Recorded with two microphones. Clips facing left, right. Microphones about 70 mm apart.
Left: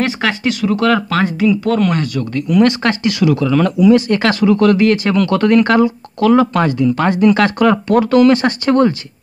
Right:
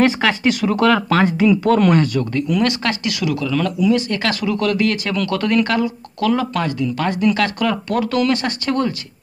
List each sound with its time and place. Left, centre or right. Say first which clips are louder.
0.2 s speech: even; centre
1.6 s speech: even; right
1.9 s speech: right 2 dB; centre
2.6 s speech: left 6 dB; left
3.8 s speech: left 7 dB; left
4.4 s speech: left 8 dB; left
5.3 s speech: left 6 dB; centre
6.6 s speech: left 6 dB; left